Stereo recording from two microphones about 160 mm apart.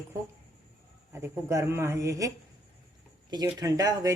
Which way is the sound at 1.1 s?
15° right (ahead or behind).